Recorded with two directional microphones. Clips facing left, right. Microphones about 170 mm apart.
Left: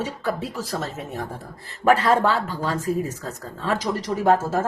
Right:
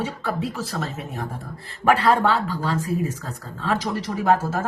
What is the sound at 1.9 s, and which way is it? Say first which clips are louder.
Speech: right 1 dB; 45° left (ahead or behind).